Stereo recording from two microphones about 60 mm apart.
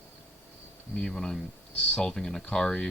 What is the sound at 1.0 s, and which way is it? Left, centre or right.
Speech, centre.